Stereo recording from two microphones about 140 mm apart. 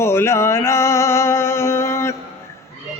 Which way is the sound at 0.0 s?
20° left (ahead or behind).